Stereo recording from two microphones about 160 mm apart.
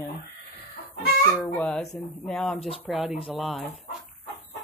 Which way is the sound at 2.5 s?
35° left (ahead or behind).